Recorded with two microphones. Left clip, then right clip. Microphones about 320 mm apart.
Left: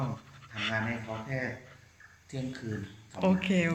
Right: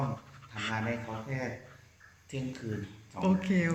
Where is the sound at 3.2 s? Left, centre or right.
Centre.